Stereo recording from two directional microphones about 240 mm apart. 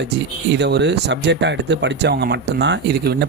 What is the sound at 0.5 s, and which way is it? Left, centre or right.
Speech, right.